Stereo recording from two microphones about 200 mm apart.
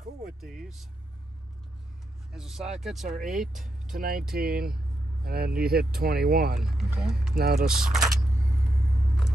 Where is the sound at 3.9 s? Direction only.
50° right (ahead or behind).